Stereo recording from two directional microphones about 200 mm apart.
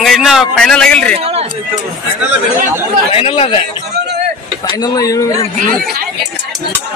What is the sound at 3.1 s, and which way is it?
Speech, 30° left (ahead or behind).